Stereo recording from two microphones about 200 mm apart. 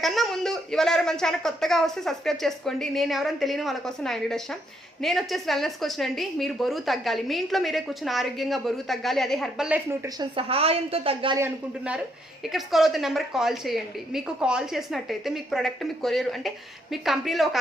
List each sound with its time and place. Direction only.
0.0 s a woman's voice: centre (ahead or behind)
10.2 s a woman's voice: 25° right (ahead or behind)
11.3 s a woman's voice: 10° right (ahead or behind)